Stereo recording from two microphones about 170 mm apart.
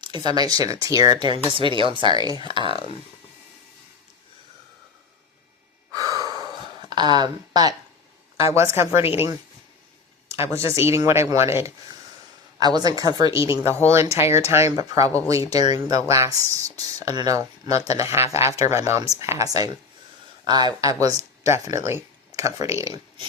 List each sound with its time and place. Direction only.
0.0 s speech: 25° right (ahead or behind)
5.9 s gasp: 20° right (ahead or behind)
6.9 s speech: 25° right (ahead or behind)